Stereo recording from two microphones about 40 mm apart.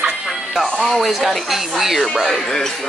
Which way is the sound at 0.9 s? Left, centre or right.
Centre.